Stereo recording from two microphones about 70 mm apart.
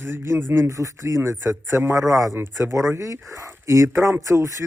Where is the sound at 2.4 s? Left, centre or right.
Right.